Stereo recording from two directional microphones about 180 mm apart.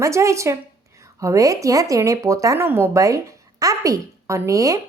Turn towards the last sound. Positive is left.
turn(degrees=-20)  # may be behind; listen again after turning